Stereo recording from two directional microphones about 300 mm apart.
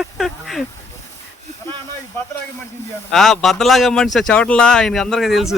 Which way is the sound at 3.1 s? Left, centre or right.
Centre.